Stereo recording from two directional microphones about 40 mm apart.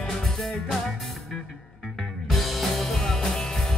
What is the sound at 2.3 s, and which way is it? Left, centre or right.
Music, centre.